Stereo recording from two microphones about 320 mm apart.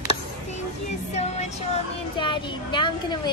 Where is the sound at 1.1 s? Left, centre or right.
Left.